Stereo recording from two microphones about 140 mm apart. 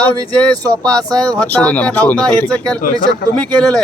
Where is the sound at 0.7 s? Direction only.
5° left (ahead or behind).